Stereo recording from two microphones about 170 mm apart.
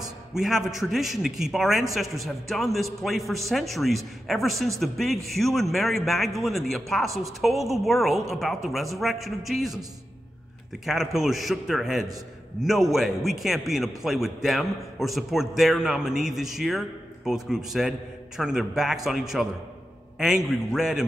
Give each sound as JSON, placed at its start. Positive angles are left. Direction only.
{"t": 0.3, "sound": "a man's voice", "side_deg": 0}
{"t": 10.9, "sound": "a man's voice", "side_deg": 0}